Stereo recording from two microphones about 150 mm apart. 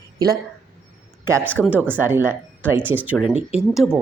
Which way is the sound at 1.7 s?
10° right (ahead or behind).